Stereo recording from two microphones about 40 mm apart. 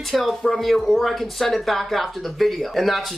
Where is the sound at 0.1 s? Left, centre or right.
Centre.